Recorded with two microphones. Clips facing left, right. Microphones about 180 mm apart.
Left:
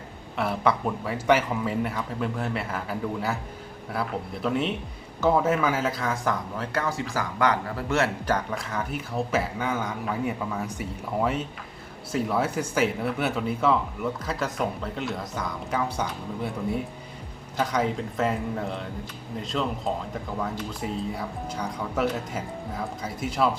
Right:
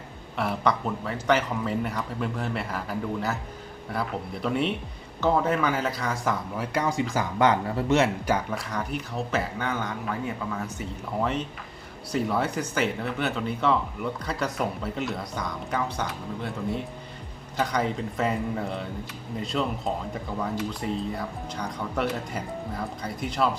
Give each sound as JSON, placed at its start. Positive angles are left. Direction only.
{"t": 0.3, "sound": "speech", "side_deg": 5}
{"t": 6.6, "sound": "speech", "side_deg": -15}
{"t": 8.4, "sound": "speech", "side_deg": 0}